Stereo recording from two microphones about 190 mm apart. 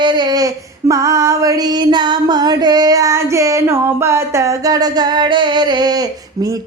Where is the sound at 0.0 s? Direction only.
25° right (ahead or behind).